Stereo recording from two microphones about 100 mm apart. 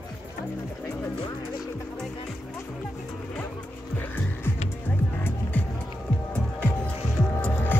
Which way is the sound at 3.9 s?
20° left (ahead or behind).